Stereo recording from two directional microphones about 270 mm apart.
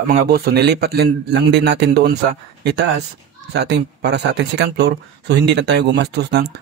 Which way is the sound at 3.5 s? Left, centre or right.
Right.